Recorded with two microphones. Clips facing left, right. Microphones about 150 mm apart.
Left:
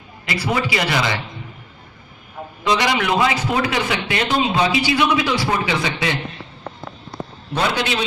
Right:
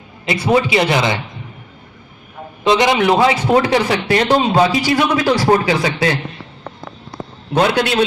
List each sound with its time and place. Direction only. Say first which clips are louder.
0.3 s a man's voice: right 7 dB; 25° right (ahead or behind)
2.6 s a man's voice: right 6 dB; 25° right (ahead or behind); by 6.1 s 40° right (ahead or behind)
7.5 s a man's voice: right 6 dB; 55° right (ahead or behind)